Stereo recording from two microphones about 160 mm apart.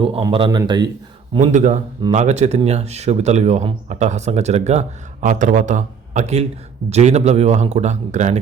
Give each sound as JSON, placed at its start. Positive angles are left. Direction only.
{"t": 0.3, "sound": "speech", "side_deg": -35}
{"t": 1.4, "sound": "speech", "side_deg": -45}